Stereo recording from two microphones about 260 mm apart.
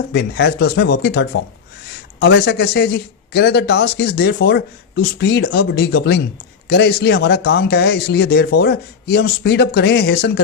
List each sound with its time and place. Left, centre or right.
0.1 s speech: left